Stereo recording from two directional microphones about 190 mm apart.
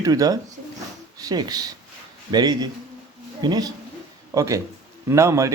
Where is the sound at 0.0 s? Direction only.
20° right (ahead or behind).